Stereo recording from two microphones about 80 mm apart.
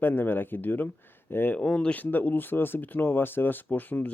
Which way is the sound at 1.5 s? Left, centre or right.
Centre.